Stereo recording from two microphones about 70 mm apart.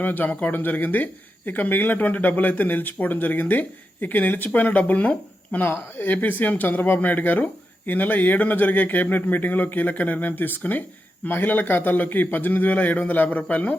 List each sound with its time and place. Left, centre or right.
0.0 s speech: left